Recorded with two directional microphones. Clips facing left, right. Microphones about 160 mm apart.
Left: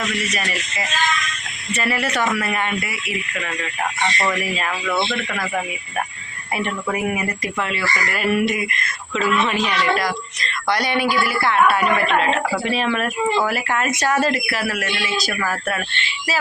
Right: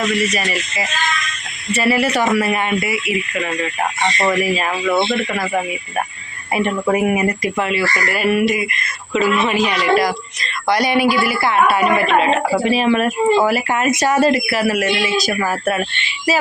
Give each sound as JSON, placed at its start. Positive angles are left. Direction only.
{"t": 0.4, "sound": "speech", "side_deg": -15}
{"t": 4.3, "sound": "speech", "side_deg": -15}
{"t": 6.8, "sound": "speech", "side_deg": -30}
{"t": 7.4, "sound": "speech", "side_deg": -10}